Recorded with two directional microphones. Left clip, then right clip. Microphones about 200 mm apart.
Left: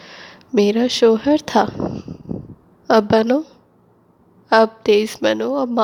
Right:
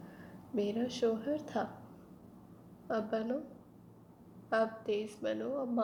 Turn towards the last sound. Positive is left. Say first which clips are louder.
# left 17 dB
turn(degrees=45)  # may be behind; listen again after turning